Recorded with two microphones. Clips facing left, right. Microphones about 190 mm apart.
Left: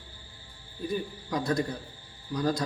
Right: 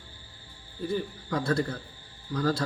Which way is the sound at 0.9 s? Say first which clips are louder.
Right 1 dB; 15° left (ahead or behind).